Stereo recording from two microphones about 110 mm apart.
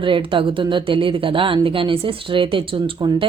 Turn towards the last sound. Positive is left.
turn(degrees=-55)  # may be behind; listen again after turning